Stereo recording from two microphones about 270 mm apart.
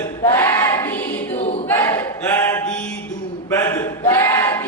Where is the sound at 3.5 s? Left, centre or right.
Centre.